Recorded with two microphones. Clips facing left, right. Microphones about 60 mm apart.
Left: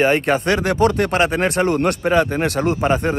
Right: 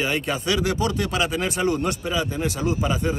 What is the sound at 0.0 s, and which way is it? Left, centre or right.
Speech, left.